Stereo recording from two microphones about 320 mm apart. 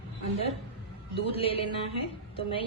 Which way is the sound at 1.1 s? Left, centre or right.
Centre.